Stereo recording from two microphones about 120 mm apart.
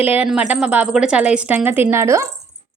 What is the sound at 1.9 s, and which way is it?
Speech, 25° right (ahead or behind).